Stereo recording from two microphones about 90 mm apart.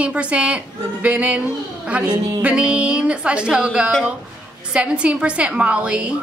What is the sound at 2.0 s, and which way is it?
Music, 45° right (ahead or behind).